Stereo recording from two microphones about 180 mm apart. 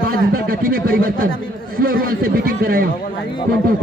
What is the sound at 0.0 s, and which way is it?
A man's voice, 55° right (ahead or behind).